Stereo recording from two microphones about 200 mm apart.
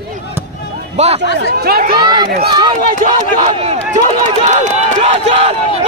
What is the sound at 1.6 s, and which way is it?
Speech, 50° right (ahead or behind).